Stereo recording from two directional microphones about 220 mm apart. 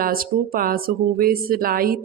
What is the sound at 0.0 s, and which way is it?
Speech, 40° right (ahead or behind).